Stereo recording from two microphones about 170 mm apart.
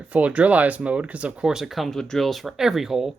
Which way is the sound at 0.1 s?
10° right (ahead or behind).